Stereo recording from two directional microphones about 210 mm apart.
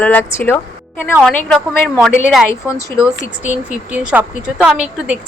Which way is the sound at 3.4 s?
5° right (ahead or behind).